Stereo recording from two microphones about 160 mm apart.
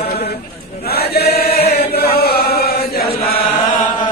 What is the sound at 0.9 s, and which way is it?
Chant, 80° left.